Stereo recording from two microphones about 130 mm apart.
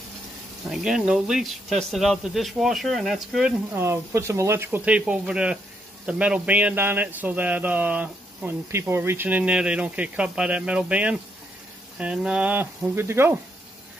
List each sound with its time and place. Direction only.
0.7 s speech: 5° right (ahead or behind)
3.7 s speech: 20° right (ahead or behind)